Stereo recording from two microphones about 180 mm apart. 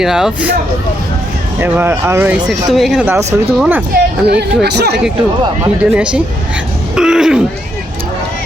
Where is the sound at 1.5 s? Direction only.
10° right (ahead or behind).